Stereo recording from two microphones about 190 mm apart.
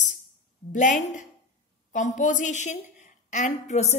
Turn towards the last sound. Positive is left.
turn(degrees=35)  # may be behind; listen again after turning